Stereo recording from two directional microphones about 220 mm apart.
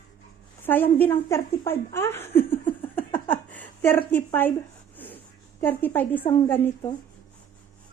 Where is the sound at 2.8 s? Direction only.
10° left (ahead or behind).